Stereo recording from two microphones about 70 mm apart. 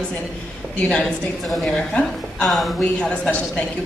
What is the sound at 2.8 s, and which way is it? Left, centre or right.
Speech, centre.